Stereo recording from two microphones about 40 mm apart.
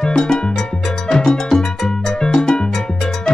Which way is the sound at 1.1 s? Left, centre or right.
Centre.